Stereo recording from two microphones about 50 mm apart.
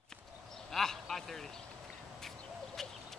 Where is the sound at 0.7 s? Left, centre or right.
Centre.